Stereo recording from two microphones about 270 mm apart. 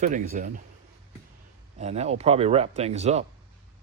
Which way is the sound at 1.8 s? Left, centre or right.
Right.